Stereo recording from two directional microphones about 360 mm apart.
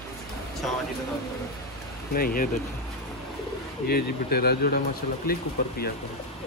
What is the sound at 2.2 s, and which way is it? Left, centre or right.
Speech, left.